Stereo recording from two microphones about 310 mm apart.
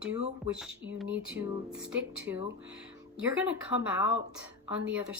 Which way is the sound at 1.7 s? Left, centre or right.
Centre.